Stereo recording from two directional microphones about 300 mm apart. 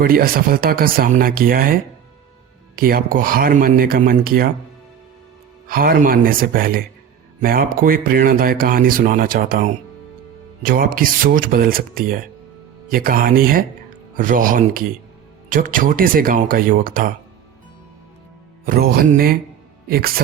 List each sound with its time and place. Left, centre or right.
0.0 s speech: right
5.6 s speech: right
18.6 s speech: right